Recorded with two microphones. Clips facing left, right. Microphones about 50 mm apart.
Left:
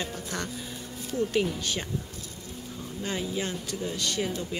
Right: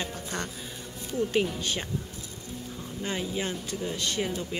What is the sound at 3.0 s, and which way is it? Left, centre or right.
Speech, centre.